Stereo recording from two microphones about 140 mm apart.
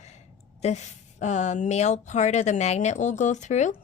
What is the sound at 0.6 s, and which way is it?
A woman's voice, 55° left (ahead or behind).